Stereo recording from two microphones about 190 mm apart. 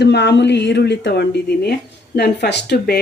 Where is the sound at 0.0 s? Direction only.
65° left (ahead or behind).